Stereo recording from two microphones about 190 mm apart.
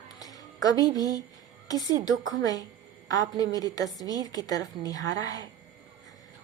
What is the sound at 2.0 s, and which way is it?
A woman's voice, 20° left (ahead or behind).